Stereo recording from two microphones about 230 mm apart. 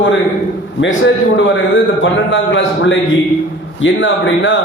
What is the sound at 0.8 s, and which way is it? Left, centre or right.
A man's voice, left.